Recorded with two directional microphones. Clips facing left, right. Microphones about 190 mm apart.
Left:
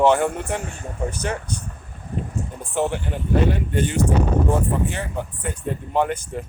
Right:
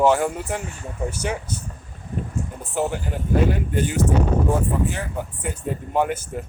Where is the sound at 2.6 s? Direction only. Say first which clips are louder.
Left 2 dB; 5° right (ahead or behind).